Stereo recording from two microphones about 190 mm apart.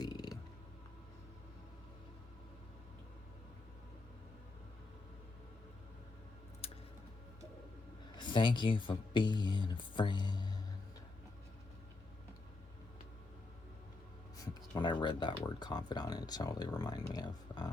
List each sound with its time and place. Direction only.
0.0 s music: 20° left (ahead or behind)
6.6 s music: 30° left (ahead or behind)
8.1 s speech: 25° left (ahead or behind)
15.0 s speech: 25° left (ahead or behind)